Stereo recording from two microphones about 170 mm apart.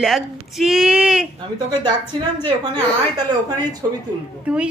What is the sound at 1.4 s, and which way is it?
Speech, 25° right (ahead or behind).